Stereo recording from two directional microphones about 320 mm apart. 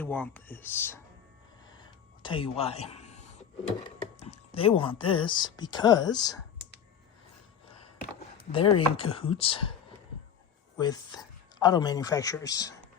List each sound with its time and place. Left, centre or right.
0.0 s speech: centre
1.7 s a sound: centre
3.8 s speech: centre
8.5 s speech: centre
10.8 s speech: centre